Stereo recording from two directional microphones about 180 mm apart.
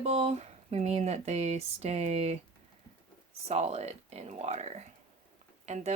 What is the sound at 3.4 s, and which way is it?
Speech, 35° right (ahead or behind).